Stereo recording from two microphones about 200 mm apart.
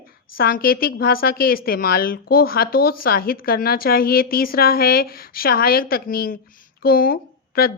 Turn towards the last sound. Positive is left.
turn(degrees=50)  # may be behind; listen again after turning